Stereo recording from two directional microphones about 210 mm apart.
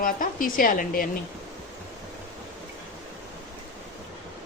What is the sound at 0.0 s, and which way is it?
A woman's voice, 40° left (ahead or behind).